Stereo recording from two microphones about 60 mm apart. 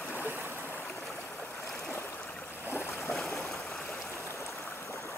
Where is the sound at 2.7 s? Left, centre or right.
Left.